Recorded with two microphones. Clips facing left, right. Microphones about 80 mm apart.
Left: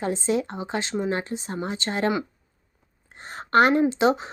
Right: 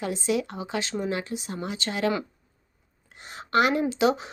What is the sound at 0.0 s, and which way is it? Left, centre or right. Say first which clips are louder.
A woman's voice: left 2 dB; left.